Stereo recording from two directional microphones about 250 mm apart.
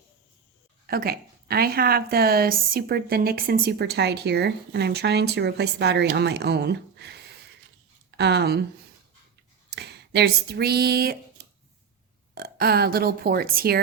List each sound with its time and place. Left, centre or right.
0.9 s speech: right
9.6 s speech: right
12.3 s speech: right